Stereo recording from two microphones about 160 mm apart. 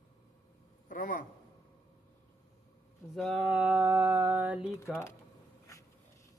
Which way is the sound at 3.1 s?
Centre (ahead or behind).